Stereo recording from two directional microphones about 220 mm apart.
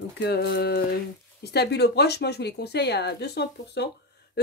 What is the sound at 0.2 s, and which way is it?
Speech, 50° left (ahead or behind).